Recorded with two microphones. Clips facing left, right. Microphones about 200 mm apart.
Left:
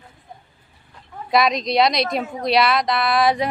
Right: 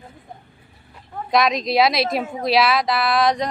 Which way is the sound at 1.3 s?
Centre (ahead or behind).